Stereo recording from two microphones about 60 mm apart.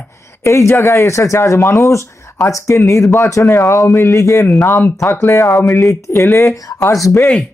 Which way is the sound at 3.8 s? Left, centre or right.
Left.